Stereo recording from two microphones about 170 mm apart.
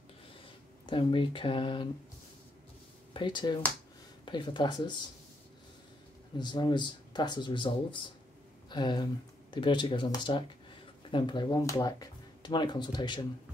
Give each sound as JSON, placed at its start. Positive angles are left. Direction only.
{"t": 0.8, "sound": "speech", "side_deg": 30}
{"t": 3.1, "sound": "speech", "side_deg": 30}
{"t": 6.4, "sound": "speech", "side_deg": 25}